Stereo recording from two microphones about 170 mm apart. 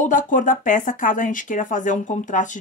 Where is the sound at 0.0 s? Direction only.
50° left (ahead or behind).